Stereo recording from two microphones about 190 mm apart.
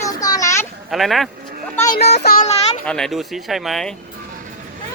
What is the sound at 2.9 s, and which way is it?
Speech, centre (ahead or behind).